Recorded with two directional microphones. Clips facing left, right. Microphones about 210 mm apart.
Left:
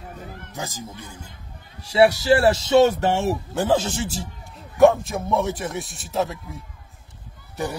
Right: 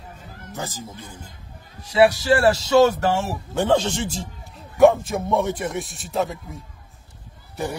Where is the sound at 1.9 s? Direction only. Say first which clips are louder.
Even; 25° left (ahead or behind).